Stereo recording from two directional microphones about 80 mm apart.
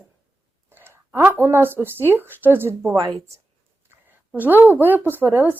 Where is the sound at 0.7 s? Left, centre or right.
Right.